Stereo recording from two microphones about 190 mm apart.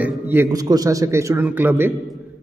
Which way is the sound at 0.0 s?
10° right (ahead or behind).